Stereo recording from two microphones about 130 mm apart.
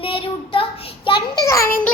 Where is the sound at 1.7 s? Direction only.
15° left (ahead or behind).